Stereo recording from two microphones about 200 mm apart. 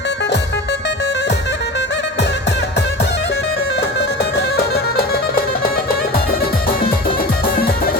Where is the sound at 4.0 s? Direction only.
55° left (ahead or behind).